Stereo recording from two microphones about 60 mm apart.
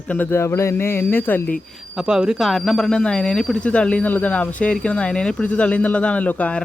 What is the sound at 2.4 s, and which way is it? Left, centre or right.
Speech, centre.